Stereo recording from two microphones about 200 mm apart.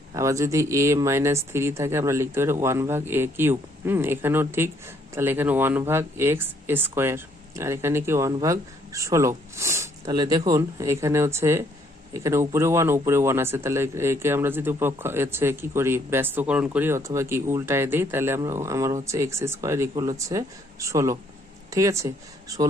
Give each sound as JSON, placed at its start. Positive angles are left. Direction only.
{"t": 0.1, "sound": "speech", "side_deg": -15}